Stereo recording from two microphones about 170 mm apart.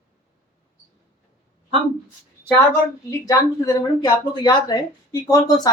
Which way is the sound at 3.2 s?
20° left (ahead or behind).